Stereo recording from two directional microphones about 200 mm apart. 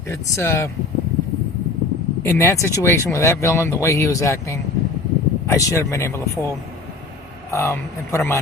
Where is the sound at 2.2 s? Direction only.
15° left (ahead or behind).